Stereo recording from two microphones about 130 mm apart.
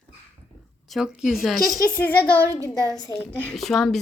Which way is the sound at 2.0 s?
15° left (ahead or behind).